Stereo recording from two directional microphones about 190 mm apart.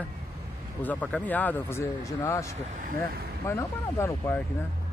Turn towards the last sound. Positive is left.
turn(degrees=15)  # may be behind; listen again after turning